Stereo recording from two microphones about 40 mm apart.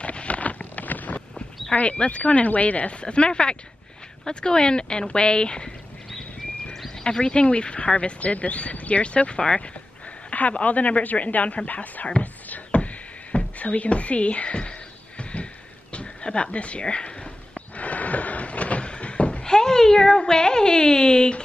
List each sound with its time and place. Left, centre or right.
0.0 s boat: left
1.8 s speech: left
7.0 s speech: left
10.3 s speech: left
12.2 s a sound: left
19.4 s speech: centre